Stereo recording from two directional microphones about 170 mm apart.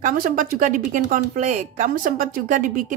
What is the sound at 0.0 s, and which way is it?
Speech, 55° right (ahead or behind).